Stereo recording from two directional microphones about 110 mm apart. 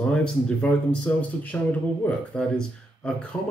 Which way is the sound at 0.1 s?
10° left (ahead or behind).